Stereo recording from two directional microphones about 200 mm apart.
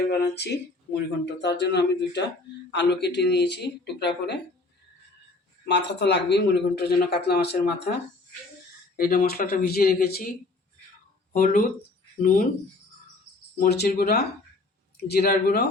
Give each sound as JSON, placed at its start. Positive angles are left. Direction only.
{"t": 0.0, "sound": "speech", "side_deg": 55}
{"t": 5.6, "sound": "speech", "side_deg": 60}
{"t": 9.0, "sound": "speech", "side_deg": 45}
{"t": 11.3, "sound": "speech", "side_deg": 40}
{"t": 13.6, "sound": "speech", "side_deg": 50}